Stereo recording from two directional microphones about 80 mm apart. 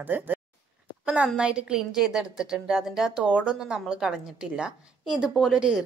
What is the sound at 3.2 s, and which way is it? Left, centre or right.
A woman's voice, centre.